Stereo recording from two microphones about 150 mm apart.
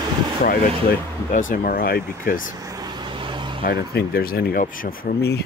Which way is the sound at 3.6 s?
90° left.